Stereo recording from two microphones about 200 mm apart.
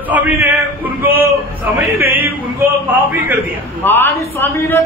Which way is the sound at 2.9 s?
10° right (ahead or behind).